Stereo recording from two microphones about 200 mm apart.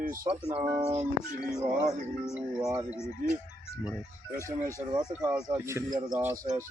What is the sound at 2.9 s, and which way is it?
Speech, 15° left (ahead or behind).